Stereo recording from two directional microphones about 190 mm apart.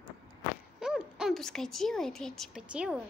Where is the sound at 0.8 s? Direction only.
5° right (ahead or behind).